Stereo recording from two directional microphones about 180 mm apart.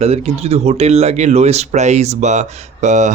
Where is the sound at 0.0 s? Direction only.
35° right (ahead or behind).